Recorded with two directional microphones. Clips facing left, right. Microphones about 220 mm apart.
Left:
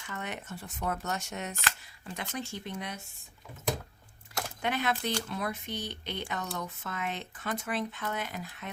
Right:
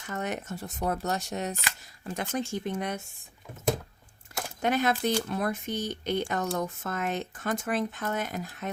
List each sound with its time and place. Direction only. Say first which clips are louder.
0.0 s speech: right 6 dB; 40° right (ahead or behind)
4.6 s speech: right 6 dB; 45° right (ahead or behind)